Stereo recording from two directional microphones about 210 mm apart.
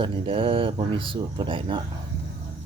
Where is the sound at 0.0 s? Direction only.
25° right (ahead or behind).